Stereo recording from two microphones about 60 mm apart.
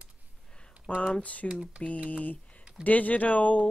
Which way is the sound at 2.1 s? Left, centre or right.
Left.